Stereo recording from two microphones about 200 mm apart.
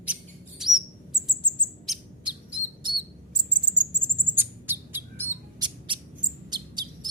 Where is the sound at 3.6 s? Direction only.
20° right (ahead or behind).